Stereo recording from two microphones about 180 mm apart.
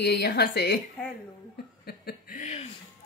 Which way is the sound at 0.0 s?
65° left (ahead or behind).